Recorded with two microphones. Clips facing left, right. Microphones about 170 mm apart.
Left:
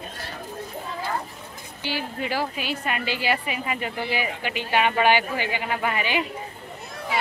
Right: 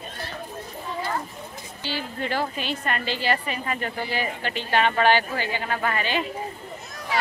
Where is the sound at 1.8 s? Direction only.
15° left (ahead or behind).